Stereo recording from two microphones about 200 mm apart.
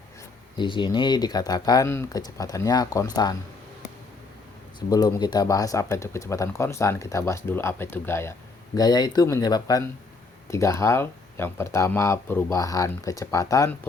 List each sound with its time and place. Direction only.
0.5 s speech: 25° left (ahead or behind)
4.9 s speech: 20° left (ahead or behind)